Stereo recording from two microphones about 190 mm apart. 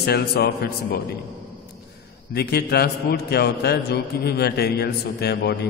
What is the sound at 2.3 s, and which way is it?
A man's voice, 55° left (ahead or behind).